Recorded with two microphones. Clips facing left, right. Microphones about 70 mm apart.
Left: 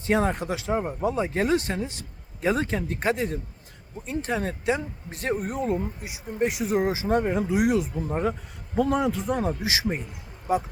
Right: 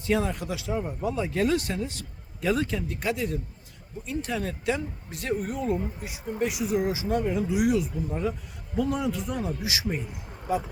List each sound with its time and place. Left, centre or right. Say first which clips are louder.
0.0 s speech: left 3 dB; left
1.0 s speech: even; left
6.0 s speech: even; centre
6.4 s speech: left 3 dB; left
7.9 s speech: left 3 dB; left